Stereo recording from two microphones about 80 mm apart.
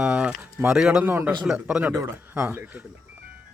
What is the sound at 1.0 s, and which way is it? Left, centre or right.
Speech, right.